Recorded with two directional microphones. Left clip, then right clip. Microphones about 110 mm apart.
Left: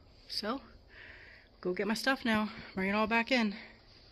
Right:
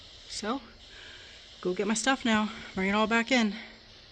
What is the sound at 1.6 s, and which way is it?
Speech, 5° right (ahead or behind).